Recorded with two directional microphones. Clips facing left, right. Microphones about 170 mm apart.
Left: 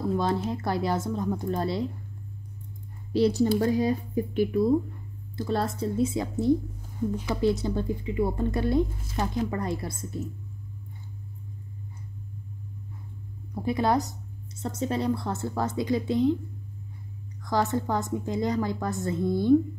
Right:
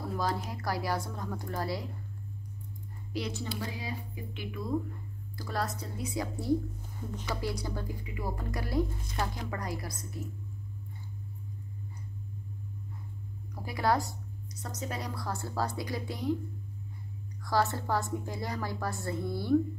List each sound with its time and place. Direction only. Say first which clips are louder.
0.5 s speech: left 6 dB; 25° left (ahead or behind)
3.1 s speech: left 14 dB; 35° left (ahead or behind)
13.6 s speech: left 5 dB; 25° left (ahead or behind)
17.4 s speech: left 4 dB; 20° left (ahead or behind)